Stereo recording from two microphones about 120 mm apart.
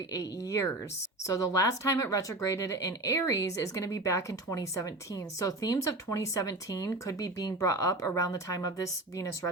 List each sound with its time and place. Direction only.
0.1 s speech: 25° left (ahead or behind)